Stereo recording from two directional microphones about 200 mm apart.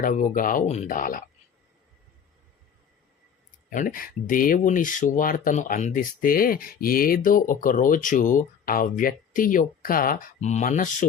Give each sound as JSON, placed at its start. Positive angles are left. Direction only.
{"t": 0.0, "sound": "speech", "side_deg": 40}
{"t": 3.7, "sound": "speech", "side_deg": 45}